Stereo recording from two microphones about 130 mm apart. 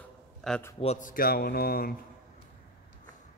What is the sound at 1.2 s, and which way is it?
Mantra, 90° left.